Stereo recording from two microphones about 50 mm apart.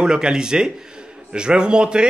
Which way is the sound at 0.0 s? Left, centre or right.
Centre.